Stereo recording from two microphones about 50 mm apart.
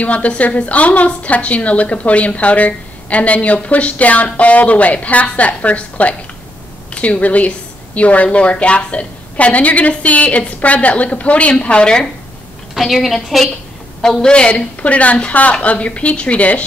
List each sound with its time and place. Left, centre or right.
0.0 s a woman's voice: left
12.7 s a woman's voice: centre
14.2 s a woman's voice: centre